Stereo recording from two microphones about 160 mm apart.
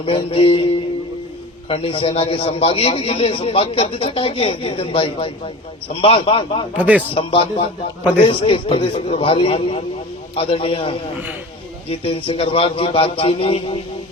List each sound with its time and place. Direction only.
0.0 s a man's voice: 35° left (ahead or behind)
6.7 s speech: 10° right (ahead or behind)
7.1 s a man's voice: 35° left (ahead or behind)